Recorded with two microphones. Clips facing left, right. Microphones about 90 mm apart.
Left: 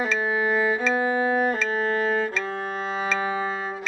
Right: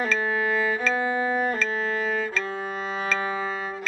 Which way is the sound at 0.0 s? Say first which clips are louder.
Left 1 dB; 15° left (ahead or behind).